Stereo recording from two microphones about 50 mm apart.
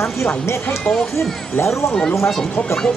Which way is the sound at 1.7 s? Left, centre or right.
Centre.